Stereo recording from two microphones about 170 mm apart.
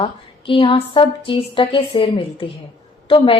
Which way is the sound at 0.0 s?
30° left (ahead or behind).